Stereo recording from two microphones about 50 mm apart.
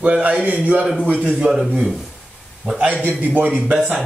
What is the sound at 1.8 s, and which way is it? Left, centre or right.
Speech, centre.